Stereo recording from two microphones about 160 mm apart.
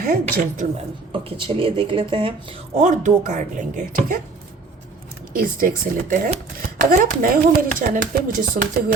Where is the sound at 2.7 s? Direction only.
50° right (ahead or behind).